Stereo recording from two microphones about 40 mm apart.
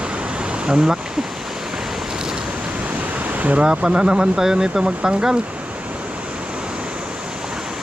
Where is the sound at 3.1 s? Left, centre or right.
Right.